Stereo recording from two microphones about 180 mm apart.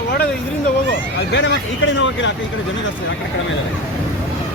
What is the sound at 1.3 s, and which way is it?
Speech, 90° left.